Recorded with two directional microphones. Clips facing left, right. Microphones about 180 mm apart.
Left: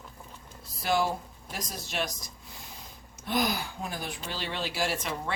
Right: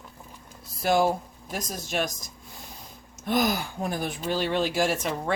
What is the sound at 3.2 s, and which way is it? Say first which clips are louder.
Speech: right 4 dB; 45° right (ahead or behind).